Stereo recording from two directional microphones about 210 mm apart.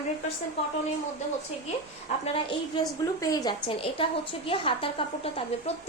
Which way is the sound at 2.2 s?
25° left (ahead or behind).